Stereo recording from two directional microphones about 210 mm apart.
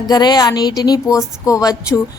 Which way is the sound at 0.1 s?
20° left (ahead or behind).